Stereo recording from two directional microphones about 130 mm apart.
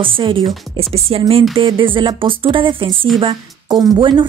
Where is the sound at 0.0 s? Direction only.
40° right (ahead or behind).